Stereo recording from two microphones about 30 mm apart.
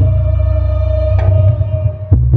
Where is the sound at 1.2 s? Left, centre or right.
Centre.